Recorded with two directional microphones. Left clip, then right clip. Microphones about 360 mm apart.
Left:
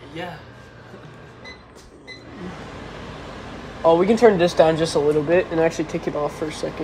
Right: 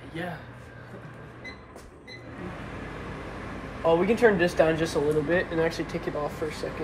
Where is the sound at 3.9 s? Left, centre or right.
Left.